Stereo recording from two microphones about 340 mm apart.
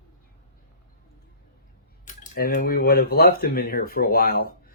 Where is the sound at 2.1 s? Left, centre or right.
Left.